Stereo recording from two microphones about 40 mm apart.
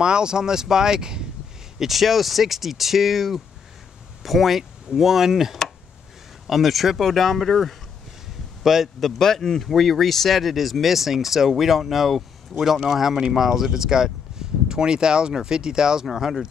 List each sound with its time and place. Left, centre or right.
0.0 s speech: centre
1.8 s speech: centre
8.6 s speech: centre
9.0 s speech: centre
9.7 s speech: centre